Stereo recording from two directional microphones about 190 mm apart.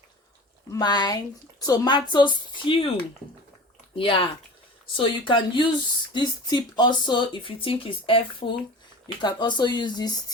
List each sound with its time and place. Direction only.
0.7 s speech: 20° left (ahead or behind)
3.9 s speech: 25° left (ahead or behind)